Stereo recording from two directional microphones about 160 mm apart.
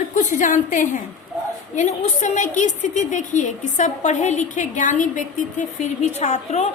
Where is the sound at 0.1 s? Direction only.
50° left (ahead or behind).